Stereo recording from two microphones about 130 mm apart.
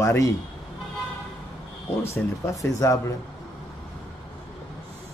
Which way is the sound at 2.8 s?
25° left (ahead or behind).